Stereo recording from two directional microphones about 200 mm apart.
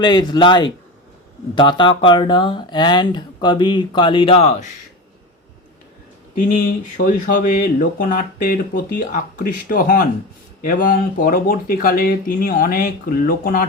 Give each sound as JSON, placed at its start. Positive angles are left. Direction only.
{"t": 0.0, "sound": "speech", "side_deg": 20}
{"t": 7.0, "sound": "speech", "side_deg": 40}